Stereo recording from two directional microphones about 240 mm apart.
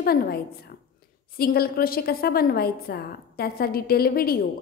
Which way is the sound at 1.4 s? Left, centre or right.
Left.